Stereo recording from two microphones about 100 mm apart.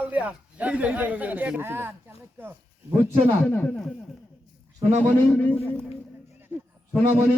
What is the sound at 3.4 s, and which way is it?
Speech, 10° left (ahead or behind).